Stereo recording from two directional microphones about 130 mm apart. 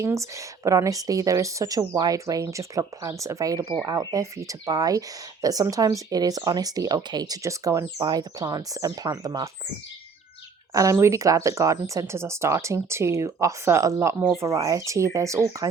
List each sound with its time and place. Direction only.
0.0 s speech: 25° right (ahead or behind)
10.8 s speech: 25° right (ahead or behind)